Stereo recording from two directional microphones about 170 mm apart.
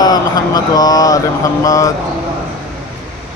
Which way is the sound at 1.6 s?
20° left (ahead or behind).